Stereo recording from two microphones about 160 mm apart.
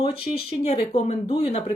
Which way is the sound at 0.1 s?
35° left (ahead or behind).